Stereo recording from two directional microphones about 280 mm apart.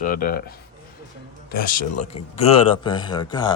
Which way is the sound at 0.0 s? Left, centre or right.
Left.